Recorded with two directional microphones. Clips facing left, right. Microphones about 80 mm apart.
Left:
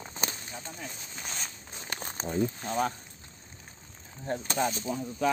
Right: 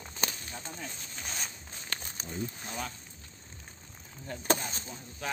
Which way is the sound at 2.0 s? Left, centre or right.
Left.